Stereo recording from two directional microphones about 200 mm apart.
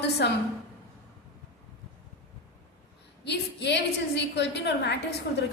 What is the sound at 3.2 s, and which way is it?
A woman's voice, 60° left (ahead or behind).